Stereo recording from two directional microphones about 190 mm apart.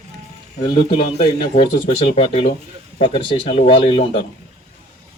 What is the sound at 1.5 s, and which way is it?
Speech, 35° left (ahead or behind).